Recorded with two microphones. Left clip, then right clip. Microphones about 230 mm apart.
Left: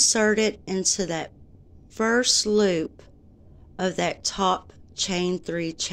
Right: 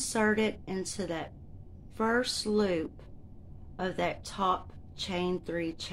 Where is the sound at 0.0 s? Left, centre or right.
Left.